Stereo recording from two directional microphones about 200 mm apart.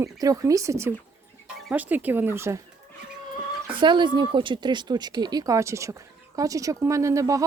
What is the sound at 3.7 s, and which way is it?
Speech, 25° right (ahead or behind).